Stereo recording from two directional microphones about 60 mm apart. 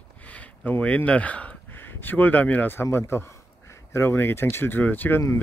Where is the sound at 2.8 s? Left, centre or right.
Left.